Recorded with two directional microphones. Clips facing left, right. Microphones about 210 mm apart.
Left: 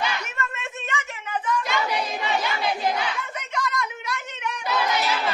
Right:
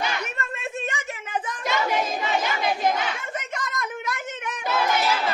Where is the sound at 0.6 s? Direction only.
40° right (ahead or behind).